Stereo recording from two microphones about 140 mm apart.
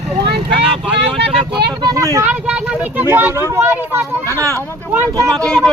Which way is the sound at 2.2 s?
10° right (ahead or behind).